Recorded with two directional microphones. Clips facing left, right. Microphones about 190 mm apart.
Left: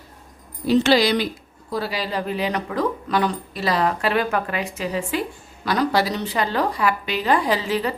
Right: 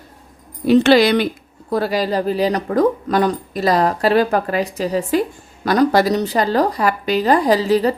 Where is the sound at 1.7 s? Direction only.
45° right (ahead or behind).